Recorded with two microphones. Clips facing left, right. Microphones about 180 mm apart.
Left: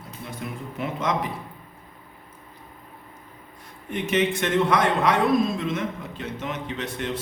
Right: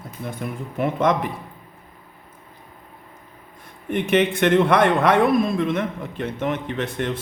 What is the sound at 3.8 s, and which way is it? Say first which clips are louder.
A man's voice: right 4 dB; 55° right (ahead or behind).